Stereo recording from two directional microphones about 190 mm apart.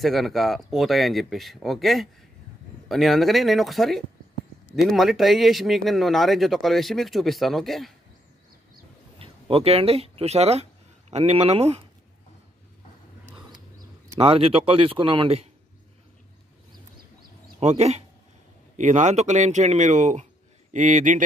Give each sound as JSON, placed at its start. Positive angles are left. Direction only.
{"t": 0.0, "sound": "speech", "side_deg": 0}
{"t": 9.2, "sound": "speech", "side_deg": -30}
{"t": 13.7, "sound": "a man's voice", "side_deg": -25}
{"t": 17.6, "sound": "speech", "side_deg": -35}